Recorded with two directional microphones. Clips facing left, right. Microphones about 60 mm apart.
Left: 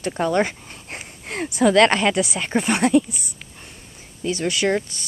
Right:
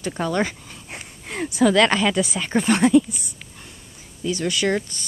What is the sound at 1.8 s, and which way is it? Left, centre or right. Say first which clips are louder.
Speech: left 5 dB; left.